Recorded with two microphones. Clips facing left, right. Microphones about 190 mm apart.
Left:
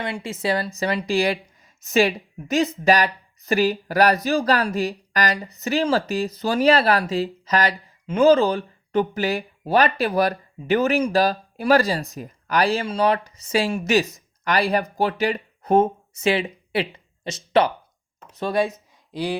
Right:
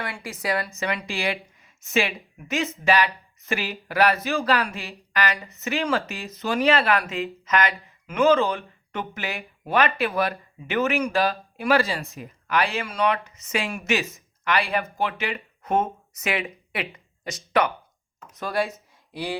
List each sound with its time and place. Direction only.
0.0 s speech: 25° left (ahead or behind)